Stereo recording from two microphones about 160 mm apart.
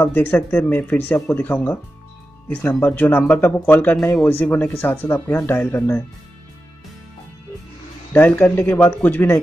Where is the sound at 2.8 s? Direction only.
10° left (ahead or behind).